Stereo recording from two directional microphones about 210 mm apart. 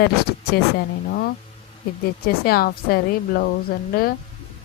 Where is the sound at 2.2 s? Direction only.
45° left (ahead or behind).